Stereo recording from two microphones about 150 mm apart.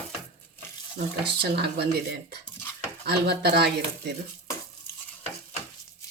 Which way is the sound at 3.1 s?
90° right.